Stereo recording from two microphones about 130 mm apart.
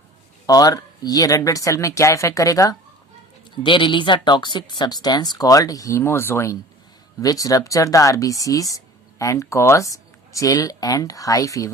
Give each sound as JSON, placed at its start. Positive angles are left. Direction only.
{"t": 0.4, "sound": "speech", "side_deg": 30}
{"t": 3.5, "sound": "speech", "side_deg": 40}